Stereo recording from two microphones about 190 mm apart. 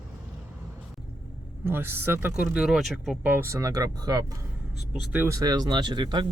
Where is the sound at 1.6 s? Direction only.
10° right (ahead or behind).